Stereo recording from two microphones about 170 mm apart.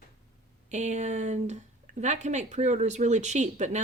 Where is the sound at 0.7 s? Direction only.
45° right (ahead or behind).